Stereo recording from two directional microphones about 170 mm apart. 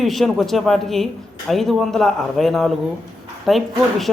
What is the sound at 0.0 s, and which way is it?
A man's voice, centre (ahead or behind).